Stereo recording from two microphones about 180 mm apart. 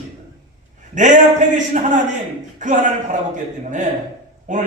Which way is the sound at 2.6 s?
45° right (ahead or behind).